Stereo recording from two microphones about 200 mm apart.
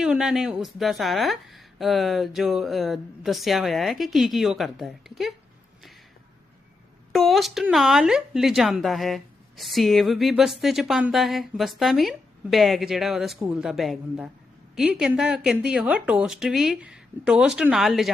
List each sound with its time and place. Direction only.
0.0 s speech: 5° right (ahead or behind)
7.1 s speech: centre (ahead or behind)